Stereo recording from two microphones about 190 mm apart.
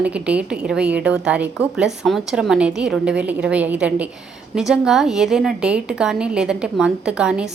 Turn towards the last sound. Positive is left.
turn(degrees=-5)  # may be behind; listen again after turning